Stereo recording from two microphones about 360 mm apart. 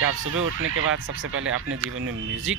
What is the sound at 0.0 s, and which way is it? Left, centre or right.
Speech, right.